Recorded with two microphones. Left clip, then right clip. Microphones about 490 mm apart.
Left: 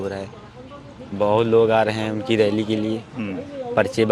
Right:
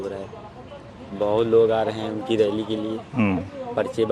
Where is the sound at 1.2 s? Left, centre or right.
Left.